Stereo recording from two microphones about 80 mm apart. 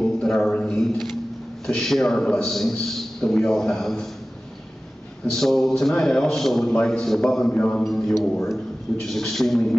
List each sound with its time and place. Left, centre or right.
0.2 s a sound: centre
1.7 s a man's voice: centre
5.2 s a man's voice: centre
7.5 s a man's voice: centre
7.8 s a man's voice: centre